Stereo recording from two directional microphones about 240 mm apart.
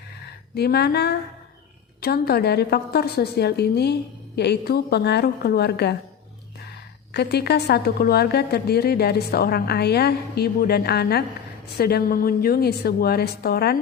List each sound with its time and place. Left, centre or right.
0.5 s a woman's voice: left
7.1 s a woman's voice: left